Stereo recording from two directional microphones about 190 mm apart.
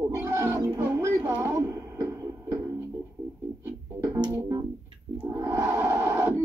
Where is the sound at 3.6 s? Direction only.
15° right (ahead or behind).